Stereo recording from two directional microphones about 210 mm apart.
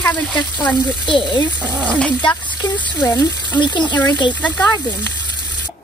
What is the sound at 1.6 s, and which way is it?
Speech, 5° left (ahead or behind).